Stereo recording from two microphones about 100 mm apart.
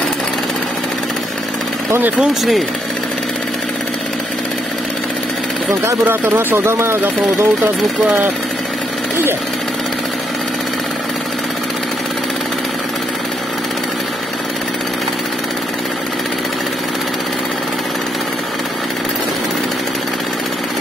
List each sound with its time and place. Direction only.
1.9 s speech: 20° right (ahead or behind)
2.1 s speech: centre (ahead or behind)
5.7 s speech: 25° right (ahead or behind)